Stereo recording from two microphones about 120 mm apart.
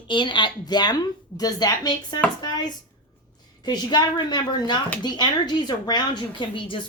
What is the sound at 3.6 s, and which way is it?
A woman's voice, 35° left (ahead or behind).